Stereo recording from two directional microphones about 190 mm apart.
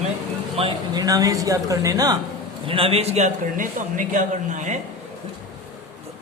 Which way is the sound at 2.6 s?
30° right (ahead or behind).